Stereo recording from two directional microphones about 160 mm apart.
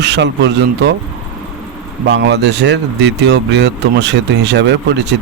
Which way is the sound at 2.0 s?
90° right.